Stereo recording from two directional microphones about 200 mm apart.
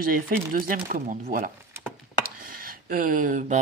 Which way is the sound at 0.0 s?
45° right (ahead or behind).